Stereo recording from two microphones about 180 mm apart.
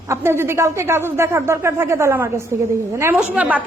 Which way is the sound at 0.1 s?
15° right (ahead or behind).